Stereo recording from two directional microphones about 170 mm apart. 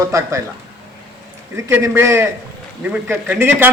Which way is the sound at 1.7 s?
10° right (ahead or behind).